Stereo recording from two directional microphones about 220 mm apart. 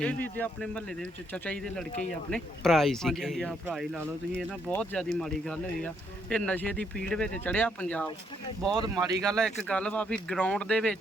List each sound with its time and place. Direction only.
0.0 s speech: 5° left (ahead or behind)
8.7 s speech: 20° right (ahead or behind)
9.2 s speech: centre (ahead or behind)